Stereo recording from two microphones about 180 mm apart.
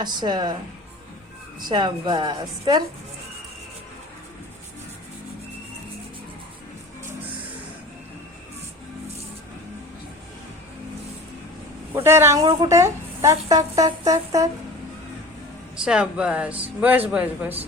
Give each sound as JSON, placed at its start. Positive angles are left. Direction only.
{"t": 0.0, "sound": "a woman's voice", "side_deg": -25}
{"t": 1.6, "sound": "a woman's voice", "side_deg": -25}
{"t": 11.9, "sound": "a woman's voice", "side_deg": -15}
{"t": 15.7, "sound": "speech", "side_deg": -5}